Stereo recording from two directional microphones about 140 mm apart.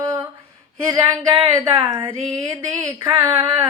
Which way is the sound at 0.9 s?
25° right (ahead or behind).